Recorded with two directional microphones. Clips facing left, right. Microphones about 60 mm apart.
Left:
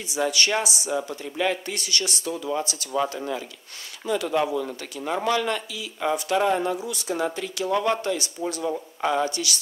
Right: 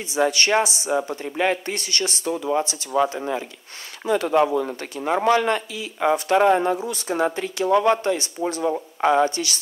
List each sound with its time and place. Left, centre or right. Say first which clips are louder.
0.1 s speech: right 4 dB; right